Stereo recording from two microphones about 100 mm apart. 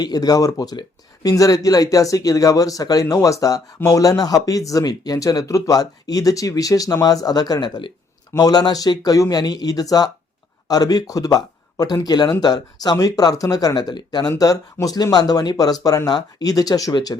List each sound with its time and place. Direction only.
0.0 s speech: 40° left (ahead or behind)